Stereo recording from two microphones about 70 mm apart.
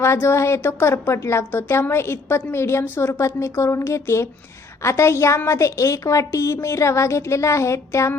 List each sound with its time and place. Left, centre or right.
0.0 s a woman's voice: left